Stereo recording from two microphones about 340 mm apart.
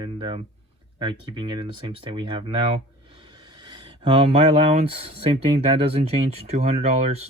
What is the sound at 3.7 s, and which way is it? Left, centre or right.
Speech, centre.